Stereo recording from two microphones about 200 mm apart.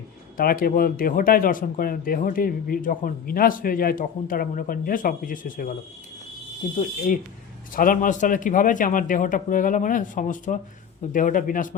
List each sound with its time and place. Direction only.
0.3 s speech: 45° left (ahead or behind)
7.7 s a man's voice: 45° left (ahead or behind)